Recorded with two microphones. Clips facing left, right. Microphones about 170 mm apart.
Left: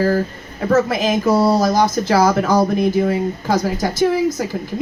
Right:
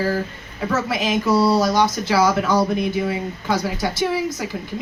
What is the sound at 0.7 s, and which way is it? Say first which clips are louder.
Speech: left 6 dB; 40° left (ahead or behind).